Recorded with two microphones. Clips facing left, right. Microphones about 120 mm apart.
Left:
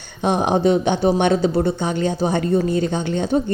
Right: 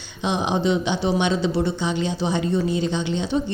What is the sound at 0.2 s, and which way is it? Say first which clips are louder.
Speech: left 5 dB; 50° left (ahead or behind).